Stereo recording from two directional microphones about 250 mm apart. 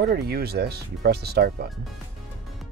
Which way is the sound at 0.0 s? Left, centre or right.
Right.